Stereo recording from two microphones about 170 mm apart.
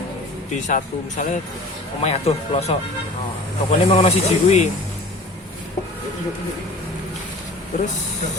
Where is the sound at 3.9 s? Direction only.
35° left (ahead or behind).